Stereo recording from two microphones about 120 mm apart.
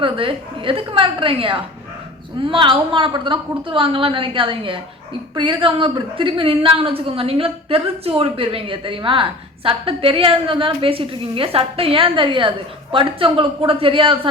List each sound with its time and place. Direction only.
0.0 s a woman's voice: 45° right (ahead or behind)